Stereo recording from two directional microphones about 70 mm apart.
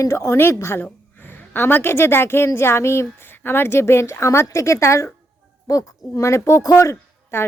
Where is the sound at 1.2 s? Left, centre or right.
Left.